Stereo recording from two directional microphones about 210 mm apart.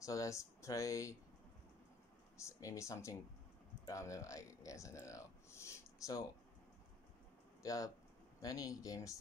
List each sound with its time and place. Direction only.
0.0 s speech: 15° left (ahead or behind)
2.3 s speech: 15° left (ahead or behind)
7.6 s speech: 15° left (ahead or behind)